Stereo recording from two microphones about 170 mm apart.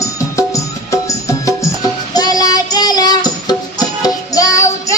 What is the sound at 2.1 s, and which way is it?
Child singing, 25° left (ahead or behind).